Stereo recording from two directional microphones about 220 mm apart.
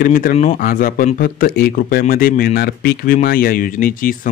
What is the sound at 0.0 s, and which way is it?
Speech, 40° left (ahead or behind).